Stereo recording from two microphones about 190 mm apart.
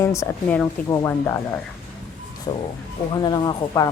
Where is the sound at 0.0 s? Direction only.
15° left (ahead or behind).